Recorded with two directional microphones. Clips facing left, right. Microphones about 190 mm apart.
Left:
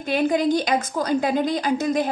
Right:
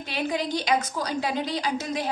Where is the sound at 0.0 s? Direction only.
50° left (ahead or behind).